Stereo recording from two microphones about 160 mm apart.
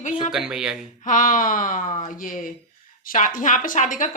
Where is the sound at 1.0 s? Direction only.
55° left (ahead or behind).